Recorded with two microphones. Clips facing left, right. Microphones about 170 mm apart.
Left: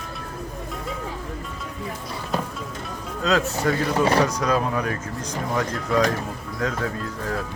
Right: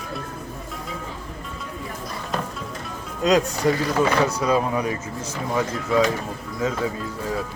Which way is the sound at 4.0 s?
35° left (ahead or behind).